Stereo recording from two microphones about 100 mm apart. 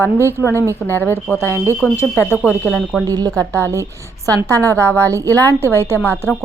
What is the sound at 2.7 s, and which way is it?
Speech, 5° right (ahead or behind).